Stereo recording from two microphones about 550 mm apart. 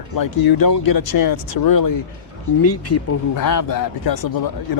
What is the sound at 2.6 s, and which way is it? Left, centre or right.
Speech, left.